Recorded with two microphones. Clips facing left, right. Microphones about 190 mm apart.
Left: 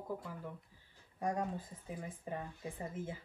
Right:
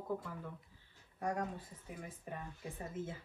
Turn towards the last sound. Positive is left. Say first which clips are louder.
# left 1 dB
turn(degrees=15)  # may be behind; listen again after turning